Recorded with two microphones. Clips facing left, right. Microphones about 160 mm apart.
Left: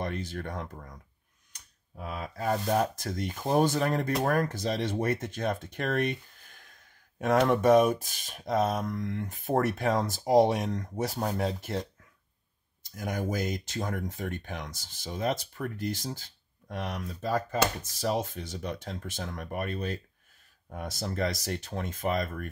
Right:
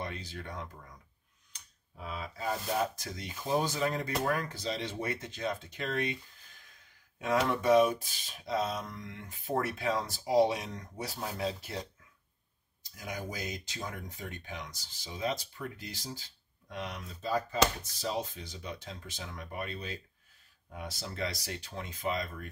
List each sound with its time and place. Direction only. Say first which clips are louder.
0.0 s speech: left 6 dB; 50° left (ahead or behind)
7.2 s speech: left 6 dB; 50° left (ahead or behind)
12.9 s speech: left 8 dB; 55° left (ahead or behind)